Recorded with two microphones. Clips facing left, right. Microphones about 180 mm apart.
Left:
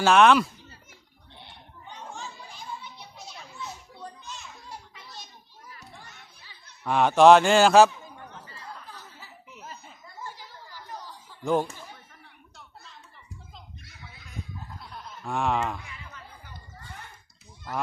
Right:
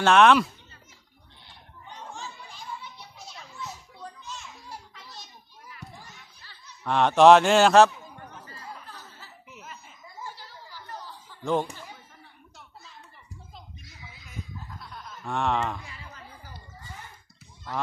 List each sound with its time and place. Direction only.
0.0 s a man's voice: centre (ahead or behind)
3.3 s children playing: centre (ahead or behind)
6.8 s a man's voice: 5° left (ahead or behind)
8.9 s chuckle: 10° left (ahead or behind)
10.3 s a sound: 15° left (ahead or behind)
15.2 s a man's voice: 5° left (ahead or behind)
15.9 s a sound: 35° right (ahead or behind)